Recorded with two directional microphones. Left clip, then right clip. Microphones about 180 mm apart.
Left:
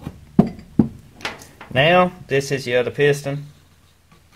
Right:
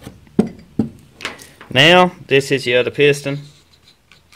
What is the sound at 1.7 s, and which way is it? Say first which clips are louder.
Speech: right 5 dB; 40° right (ahead or behind).